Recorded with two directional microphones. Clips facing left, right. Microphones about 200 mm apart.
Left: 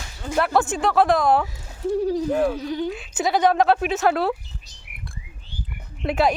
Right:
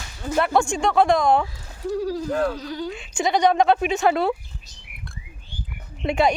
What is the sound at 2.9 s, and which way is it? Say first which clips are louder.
A woman's voice: even; 5° left (ahead or behind).